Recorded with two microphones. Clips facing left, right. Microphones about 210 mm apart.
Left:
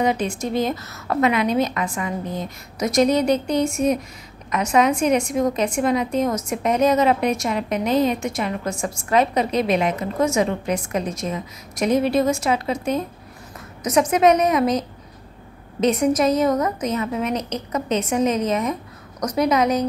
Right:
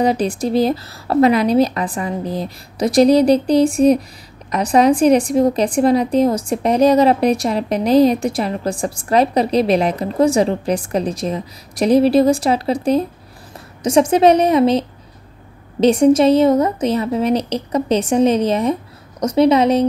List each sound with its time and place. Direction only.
0.0 s a woman's voice: 35° right (ahead or behind)